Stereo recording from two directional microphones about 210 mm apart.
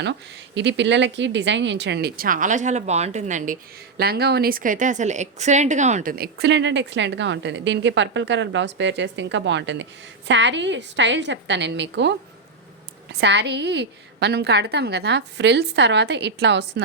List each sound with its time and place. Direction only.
0.0 s speech: 55° right (ahead or behind)
13.1 s speech: 55° right (ahead or behind)